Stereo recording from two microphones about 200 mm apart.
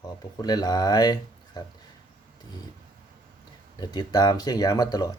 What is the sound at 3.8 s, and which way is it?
A man's voice, 20° left (ahead or behind).